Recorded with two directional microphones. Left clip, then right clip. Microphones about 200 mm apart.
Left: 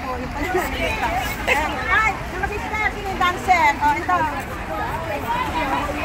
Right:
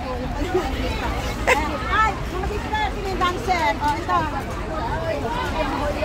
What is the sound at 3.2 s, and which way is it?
Vehicle, 15° left (ahead or behind).